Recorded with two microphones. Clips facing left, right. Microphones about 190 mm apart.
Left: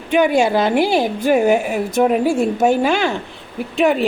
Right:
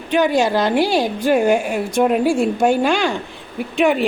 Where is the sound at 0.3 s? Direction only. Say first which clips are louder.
Left 1 dB; 5° left (ahead or behind).